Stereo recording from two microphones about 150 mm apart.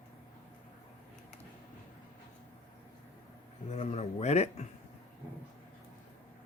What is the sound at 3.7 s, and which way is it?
Speech, 45° left (ahead or behind).